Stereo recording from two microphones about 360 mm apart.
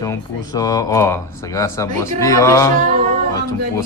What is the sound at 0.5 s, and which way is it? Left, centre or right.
Speech, centre.